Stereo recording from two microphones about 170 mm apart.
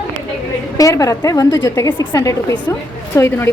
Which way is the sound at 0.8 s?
20° left (ahead or behind).